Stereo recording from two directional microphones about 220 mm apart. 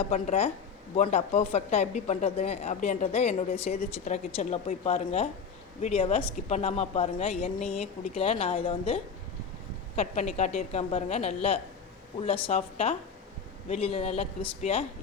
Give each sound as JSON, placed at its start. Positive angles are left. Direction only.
{"t": 0.0, "sound": "a woman's voice", "side_deg": 30}